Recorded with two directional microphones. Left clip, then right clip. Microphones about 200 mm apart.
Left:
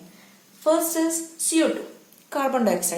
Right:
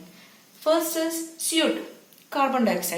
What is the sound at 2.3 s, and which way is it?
Speech, 55° left (ahead or behind).